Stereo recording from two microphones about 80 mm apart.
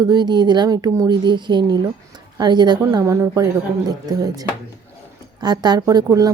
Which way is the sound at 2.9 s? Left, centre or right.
Right.